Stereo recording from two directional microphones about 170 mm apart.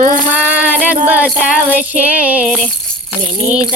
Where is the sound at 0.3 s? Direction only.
10° right (ahead or behind).